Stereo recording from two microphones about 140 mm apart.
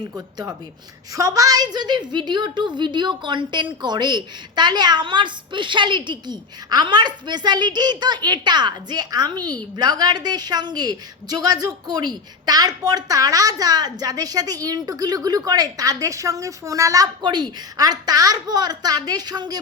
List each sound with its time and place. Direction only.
1.1 s a woman's voice: 25° right (ahead or behind)